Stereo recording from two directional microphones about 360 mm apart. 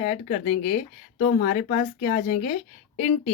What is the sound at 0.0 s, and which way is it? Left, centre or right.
Speech, left.